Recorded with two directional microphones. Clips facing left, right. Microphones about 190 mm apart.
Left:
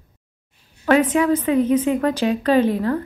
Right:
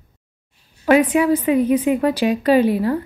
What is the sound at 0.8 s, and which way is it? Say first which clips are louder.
A woman's voice: right 2 dB; 10° right (ahead or behind).